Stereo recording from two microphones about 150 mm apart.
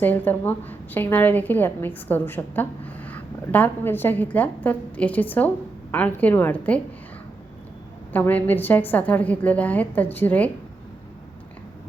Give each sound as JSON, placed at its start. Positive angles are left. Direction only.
{"t": 0.0, "sound": "a woman's voice", "side_deg": 10}
{"t": 8.1, "sound": "a woman's voice", "side_deg": 10}